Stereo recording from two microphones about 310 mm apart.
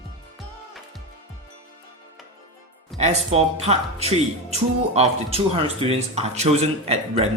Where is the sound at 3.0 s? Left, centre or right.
Right.